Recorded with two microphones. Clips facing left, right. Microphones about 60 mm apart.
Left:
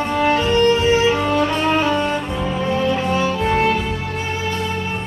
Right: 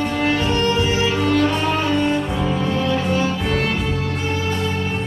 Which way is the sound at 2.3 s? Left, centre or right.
Centre.